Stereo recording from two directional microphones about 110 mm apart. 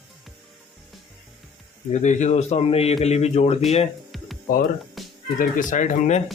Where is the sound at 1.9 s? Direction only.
90° left; by 2.9 s 65° left (ahead or behind).